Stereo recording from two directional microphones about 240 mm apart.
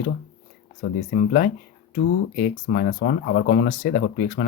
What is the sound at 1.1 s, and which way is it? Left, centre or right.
Speech, left.